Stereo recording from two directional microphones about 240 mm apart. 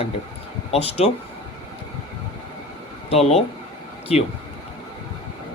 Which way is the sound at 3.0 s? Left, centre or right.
Left.